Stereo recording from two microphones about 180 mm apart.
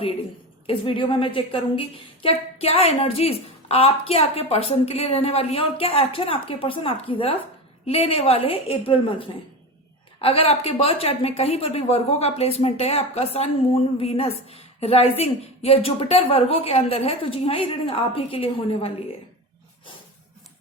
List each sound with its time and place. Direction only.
0.7 s a woman's voice: 30° left (ahead or behind)